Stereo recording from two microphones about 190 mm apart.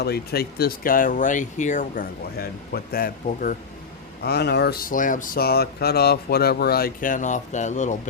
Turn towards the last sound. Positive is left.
turn(degrees=40)  # may be behind; listen again after turning